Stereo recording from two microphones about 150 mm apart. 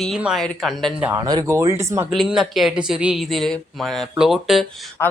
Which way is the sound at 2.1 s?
Centre (ahead or behind).